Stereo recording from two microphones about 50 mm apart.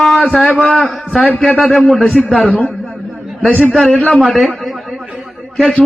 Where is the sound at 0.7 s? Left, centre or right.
Centre.